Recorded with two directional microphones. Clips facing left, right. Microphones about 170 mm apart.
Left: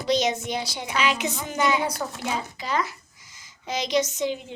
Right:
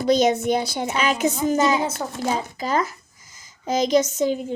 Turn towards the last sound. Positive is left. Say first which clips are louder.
# right 5 dB
turn(degrees=-45)  # may be behind; listen again after turning